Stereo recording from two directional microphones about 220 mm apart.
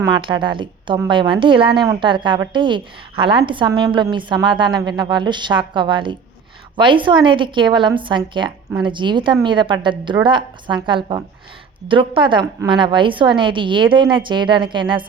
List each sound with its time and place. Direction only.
0.0 s a woman's voice: 20° right (ahead or behind)